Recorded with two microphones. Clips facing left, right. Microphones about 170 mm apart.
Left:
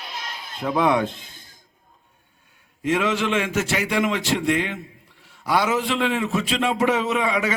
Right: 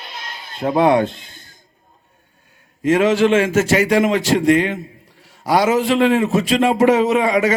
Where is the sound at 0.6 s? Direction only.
40° right (ahead or behind).